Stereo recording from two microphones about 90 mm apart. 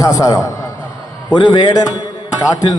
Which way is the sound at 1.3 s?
55° left (ahead or behind).